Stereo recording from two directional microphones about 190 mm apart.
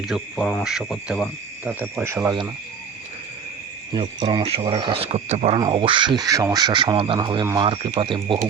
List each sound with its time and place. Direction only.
0.0 s speech: 5° right (ahead or behind)
4.2 s speech: 30° right (ahead or behind)
5.5 s speech: 25° right (ahead or behind)